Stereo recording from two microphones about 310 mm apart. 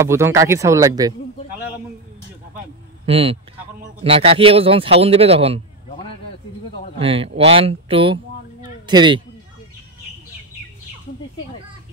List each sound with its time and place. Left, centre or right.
0.0 s a man's voice: centre
3.1 s a man's voice: centre
7.0 s a man's voice: centre